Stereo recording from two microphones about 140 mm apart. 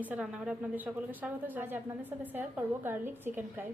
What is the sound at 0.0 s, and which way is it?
Speech, 10° right (ahead or behind).